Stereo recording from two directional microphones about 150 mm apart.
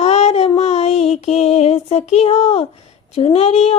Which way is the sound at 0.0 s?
45° left (ahead or behind).